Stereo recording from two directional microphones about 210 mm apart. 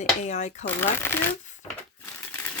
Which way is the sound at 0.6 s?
10° left (ahead or behind).